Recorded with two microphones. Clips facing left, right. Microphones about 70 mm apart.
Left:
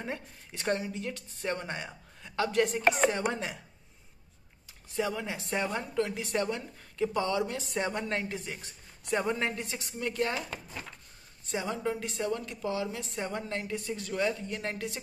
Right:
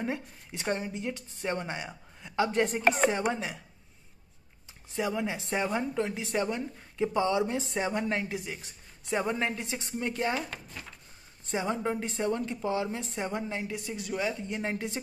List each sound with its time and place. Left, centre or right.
0.0 s speech: centre
0.7 s speech: right
2.6 s speech: right
3.0 s speech: centre
3.3 s a woman's voice: centre
4.9 s a woman's voice: centre
7.7 s a woman's voice: centre
9.8 s a woman's voice: right
11.4 s a woman's voice: right